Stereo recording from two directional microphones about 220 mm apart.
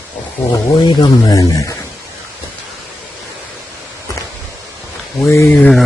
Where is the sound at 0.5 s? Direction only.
20° left (ahead or behind).